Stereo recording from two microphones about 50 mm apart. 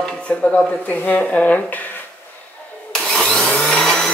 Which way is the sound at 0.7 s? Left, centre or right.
Left.